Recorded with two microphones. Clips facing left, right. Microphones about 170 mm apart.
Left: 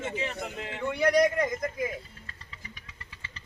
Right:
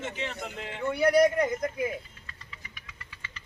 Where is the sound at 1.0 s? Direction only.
10° right (ahead or behind).